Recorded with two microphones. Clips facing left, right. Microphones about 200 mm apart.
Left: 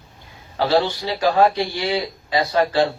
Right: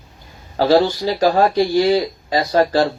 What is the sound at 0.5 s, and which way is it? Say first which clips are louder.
Speech: right 5 dB; 40° right (ahead or behind).